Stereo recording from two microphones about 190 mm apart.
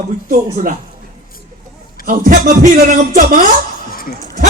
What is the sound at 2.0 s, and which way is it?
A man's voice, 45° right (ahead or behind).